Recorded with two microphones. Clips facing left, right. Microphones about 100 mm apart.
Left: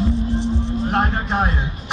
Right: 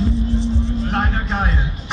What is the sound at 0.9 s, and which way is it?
Music, 30° left (ahead or behind).